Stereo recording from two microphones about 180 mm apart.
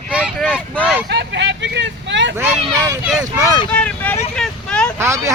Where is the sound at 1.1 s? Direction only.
75° right (ahead or behind).